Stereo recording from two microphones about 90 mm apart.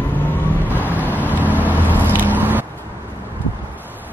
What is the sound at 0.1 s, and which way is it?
Vehicle, 20° left (ahead or behind).